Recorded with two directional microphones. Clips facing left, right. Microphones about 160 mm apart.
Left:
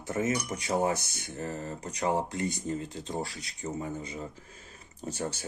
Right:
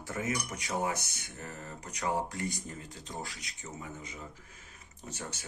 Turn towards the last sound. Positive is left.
turn(degrees=30)  # may be behind; listen again after turning